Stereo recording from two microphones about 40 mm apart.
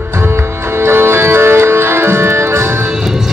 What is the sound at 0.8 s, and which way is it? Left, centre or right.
Music, right.